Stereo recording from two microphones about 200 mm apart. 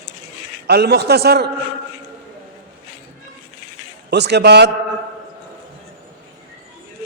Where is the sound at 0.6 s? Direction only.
55° right (ahead or behind).